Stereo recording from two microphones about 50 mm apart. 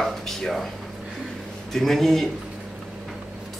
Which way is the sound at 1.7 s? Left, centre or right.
Centre.